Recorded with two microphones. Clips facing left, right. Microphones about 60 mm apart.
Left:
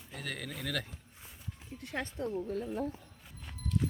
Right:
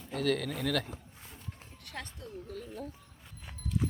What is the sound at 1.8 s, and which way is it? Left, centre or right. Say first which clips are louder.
Speech: left 8 dB; left.